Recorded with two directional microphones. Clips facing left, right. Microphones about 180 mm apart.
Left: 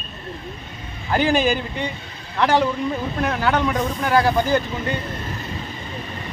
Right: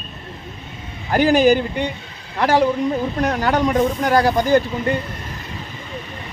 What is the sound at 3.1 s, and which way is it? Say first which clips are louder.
Speech: even; 40° right (ahead or behind).